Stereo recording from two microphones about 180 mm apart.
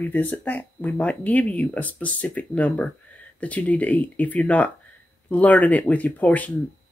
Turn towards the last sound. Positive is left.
turn(degrees=10)  # may be behind; listen again after turning